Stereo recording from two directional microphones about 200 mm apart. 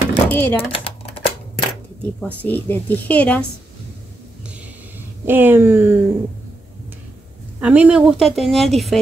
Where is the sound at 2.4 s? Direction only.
10° left (ahead or behind).